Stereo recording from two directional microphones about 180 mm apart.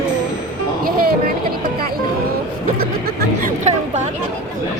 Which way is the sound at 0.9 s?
55° right (ahead or behind).